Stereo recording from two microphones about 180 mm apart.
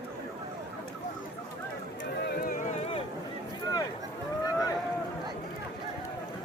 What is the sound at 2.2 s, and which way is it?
Music, 60° left (ahead or behind).